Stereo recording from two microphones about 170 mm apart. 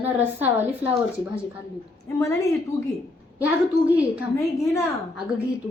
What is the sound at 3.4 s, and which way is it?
Speech, 10° right (ahead or behind).